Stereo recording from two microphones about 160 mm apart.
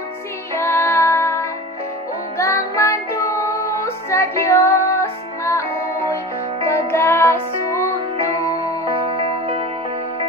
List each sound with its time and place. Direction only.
0.6 s music: 15° left (ahead or behind)
8.4 s music: 35° right (ahead or behind)